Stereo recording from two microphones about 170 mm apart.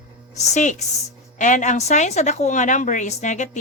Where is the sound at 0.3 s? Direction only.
45° left (ahead or behind).